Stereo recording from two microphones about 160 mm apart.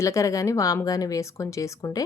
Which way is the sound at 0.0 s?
20° left (ahead or behind).